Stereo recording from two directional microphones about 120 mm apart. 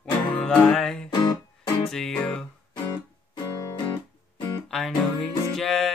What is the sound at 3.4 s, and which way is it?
Music, 25° left (ahead or behind).